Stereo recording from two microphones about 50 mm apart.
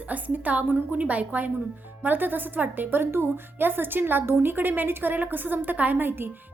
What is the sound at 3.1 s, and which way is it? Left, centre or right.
A woman's voice, right.